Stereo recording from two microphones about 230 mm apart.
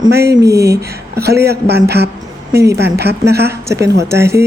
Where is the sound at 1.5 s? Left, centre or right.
Right.